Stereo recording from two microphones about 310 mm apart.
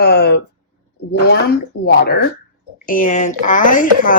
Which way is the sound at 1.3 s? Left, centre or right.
Left.